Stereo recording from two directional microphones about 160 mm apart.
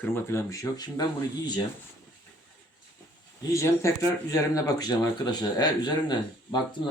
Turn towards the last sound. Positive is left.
turn(degrees=25)  # may be behind; listen again after turning